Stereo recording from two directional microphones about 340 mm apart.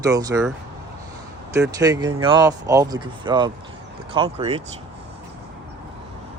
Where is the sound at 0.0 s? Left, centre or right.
Centre.